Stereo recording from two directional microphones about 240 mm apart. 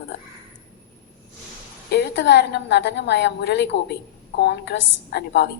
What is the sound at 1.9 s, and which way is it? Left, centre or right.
A woman's voice, left.